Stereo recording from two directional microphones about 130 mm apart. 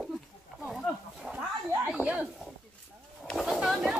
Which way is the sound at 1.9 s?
10° right (ahead or behind).